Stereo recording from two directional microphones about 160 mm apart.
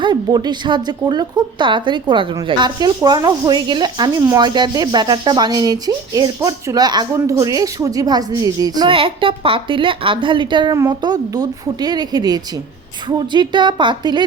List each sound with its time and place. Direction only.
0.0 s a woman's voice: 25° right (ahead or behind)